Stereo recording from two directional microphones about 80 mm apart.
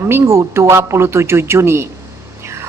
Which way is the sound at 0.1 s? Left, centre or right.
Right.